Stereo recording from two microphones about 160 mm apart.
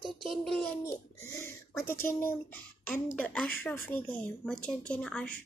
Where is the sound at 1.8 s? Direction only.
15° left (ahead or behind).